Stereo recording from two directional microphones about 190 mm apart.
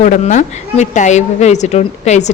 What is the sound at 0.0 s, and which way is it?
A woman's voice, 40° left (ahead or behind).